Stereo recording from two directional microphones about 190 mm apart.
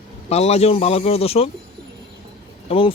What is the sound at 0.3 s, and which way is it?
Speech, 35° left (ahead or behind).